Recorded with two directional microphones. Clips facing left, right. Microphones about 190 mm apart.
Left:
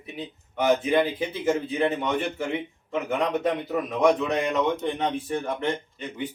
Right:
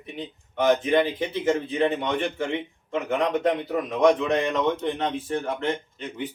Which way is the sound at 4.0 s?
10° left (ahead or behind).